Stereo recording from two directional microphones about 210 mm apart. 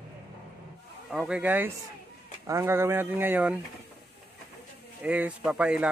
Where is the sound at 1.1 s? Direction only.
5° right (ahead or behind).